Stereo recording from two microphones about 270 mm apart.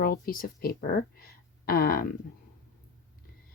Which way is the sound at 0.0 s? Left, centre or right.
Left.